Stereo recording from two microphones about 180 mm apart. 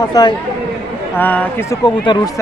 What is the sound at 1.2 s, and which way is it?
Speech, 10° left (ahead or behind).